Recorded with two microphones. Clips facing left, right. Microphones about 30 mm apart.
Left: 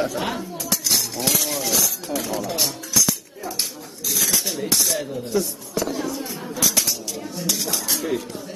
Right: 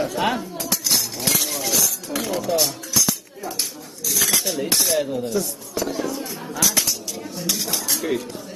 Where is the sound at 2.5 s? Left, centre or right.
Centre.